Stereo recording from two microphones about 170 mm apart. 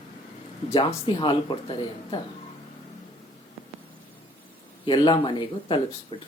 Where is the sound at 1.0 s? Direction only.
30° left (ahead or behind).